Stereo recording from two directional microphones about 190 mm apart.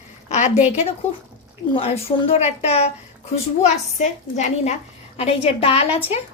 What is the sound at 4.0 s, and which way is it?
A woman's voice, 40° left (ahead or behind).